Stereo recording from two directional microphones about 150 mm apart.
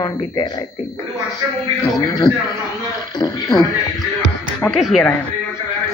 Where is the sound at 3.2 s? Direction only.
25° left (ahead or behind).